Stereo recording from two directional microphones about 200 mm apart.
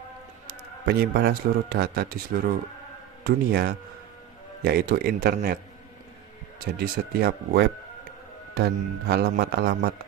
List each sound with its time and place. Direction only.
0.5 s a man's voice: 50° right (ahead or behind)
6.6 s a man's voice: 50° right (ahead or behind)